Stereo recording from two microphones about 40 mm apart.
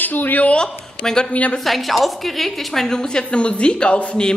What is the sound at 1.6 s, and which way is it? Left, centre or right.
A woman's voice, centre.